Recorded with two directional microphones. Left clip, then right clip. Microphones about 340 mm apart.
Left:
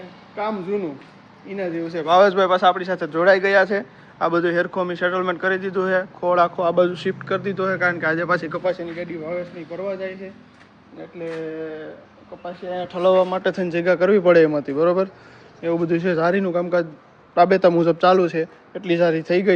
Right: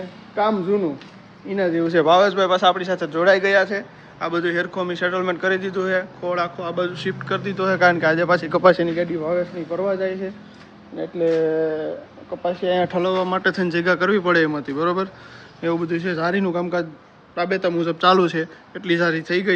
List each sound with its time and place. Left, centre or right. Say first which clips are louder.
0.3 s a man's voice: right 5 dB; centre
12.4 s speech: right 8 dB; right
13.0 s a man's voice: left 3 dB; centre
17.3 s a man's voice: left 7 dB; centre